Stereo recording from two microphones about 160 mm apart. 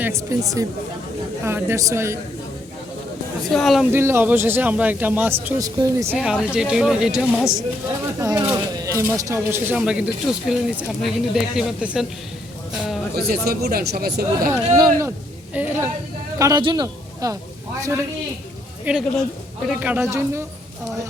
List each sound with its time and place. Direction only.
0.0 s speech: 20° right (ahead or behind)
3.5 s speech: centre (ahead or behind)
3.9 s speech: 15° right (ahead or behind)
5.5 s speech: 20° right (ahead or behind)
6.1 s speech: 5° right (ahead or behind)
8.2 s speech: 20° right (ahead or behind)
9.7 s speech: 5° right (ahead or behind)
13.1 s speech: 75° right (ahead or behind)
14.5 s speech: 20° right (ahead or behind)
16.4 s speech: 25° right (ahead or behind)
18.9 s speech: 10° right (ahead or behind)